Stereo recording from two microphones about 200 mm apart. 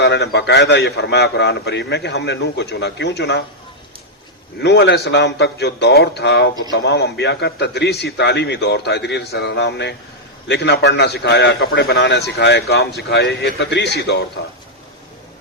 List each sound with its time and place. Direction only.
0.0 s a man's voice: 60° left (ahead or behind)
4.6 s a man's voice: 60° left (ahead or behind)